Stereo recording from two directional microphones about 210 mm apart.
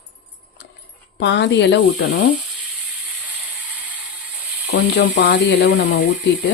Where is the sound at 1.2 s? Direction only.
55° left (ahead or behind).